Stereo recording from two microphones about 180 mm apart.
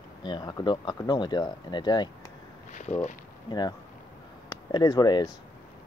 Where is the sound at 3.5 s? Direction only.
25° left (ahead or behind).